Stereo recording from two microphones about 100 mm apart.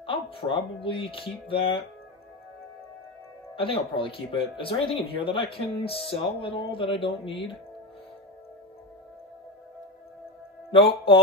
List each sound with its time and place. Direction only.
0.0 s speech: 65° left (ahead or behind)
3.5 s speech: 65° left (ahead or behind)
10.7 s speech: 65° left (ahead or behind)